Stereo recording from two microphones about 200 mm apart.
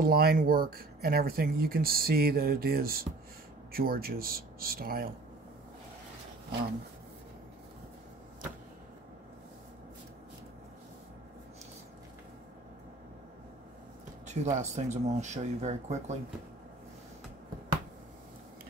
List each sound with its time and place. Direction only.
0.0 s speech: 50° right (ahead or behind)
14.2 s speech: 35° right (ahead or behind)